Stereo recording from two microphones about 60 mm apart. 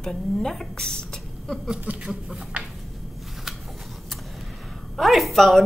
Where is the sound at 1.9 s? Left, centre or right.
Right.